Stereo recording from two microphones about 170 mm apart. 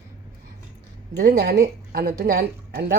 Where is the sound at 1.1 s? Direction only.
80° right.